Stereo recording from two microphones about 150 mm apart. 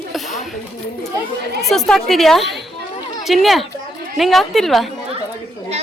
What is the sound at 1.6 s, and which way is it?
Speech, centre (ahead or behind).